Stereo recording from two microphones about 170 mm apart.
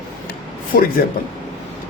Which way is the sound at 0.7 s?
55° left (ahead or behind).